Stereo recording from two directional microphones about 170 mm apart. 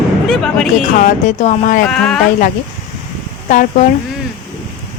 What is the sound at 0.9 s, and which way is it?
Speech, 45° left (ahead or behind).